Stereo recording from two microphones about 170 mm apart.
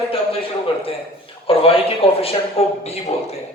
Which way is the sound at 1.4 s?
35° left (ahead or behind).